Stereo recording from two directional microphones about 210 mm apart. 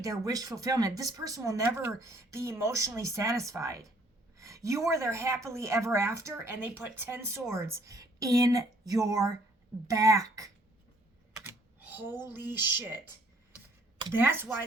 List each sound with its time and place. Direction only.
0.0 s a woman's voice: 15° right (ahead or behind)
11.3 s camera: 10° right (ahead or behind)
14.1 s a woman's voice: 10° right (ahead or behind)